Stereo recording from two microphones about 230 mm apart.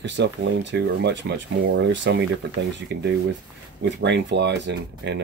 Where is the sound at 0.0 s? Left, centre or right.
Right.